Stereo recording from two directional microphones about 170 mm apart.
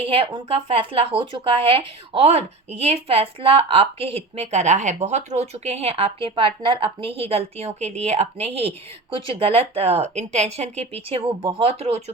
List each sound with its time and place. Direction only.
0.0 s speech: 35° right (ahead or behind)